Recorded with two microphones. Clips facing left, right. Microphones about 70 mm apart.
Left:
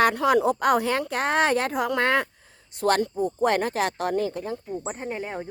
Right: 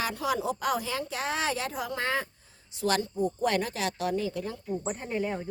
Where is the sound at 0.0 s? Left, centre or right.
Left.